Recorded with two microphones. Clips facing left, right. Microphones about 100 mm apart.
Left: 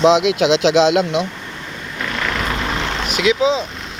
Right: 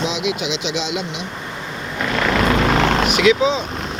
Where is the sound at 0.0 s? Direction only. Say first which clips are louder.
Left 9 dB; 90° left.